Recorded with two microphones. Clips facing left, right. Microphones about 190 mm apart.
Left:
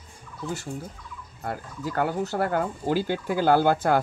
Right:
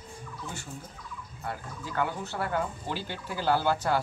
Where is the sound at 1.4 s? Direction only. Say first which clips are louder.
Left 6 dB; 45° left (ahead or behind).